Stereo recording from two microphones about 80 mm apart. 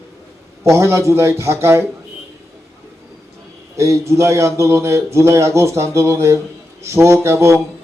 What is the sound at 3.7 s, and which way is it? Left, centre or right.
Speech, right.